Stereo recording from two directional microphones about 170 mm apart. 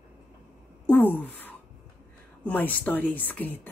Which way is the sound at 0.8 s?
10° left (ahead or behind).